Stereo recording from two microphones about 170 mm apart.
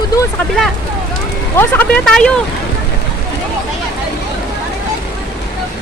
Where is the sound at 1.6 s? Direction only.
10° left (ahead or behind).